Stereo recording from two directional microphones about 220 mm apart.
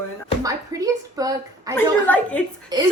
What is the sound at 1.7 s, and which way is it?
Speech, 5° left (ahead or behind).